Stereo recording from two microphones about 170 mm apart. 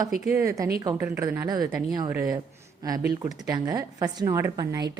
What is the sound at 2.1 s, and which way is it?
A woman's voice, 10° right (ahead or behind).